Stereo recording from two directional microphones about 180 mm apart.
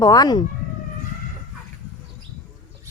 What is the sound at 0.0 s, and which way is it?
Speech, 20° left (ahead or behind).